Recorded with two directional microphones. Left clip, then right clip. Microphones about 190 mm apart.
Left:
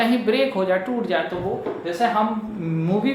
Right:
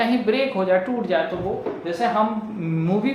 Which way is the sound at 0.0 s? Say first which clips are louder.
Left 1 dB; centre (ahead or behind).